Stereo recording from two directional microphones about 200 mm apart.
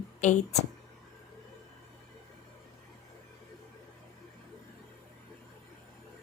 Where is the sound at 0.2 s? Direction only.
35° left (ahead or behind).